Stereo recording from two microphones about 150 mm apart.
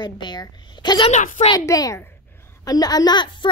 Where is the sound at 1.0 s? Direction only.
55° left (ahead or behind).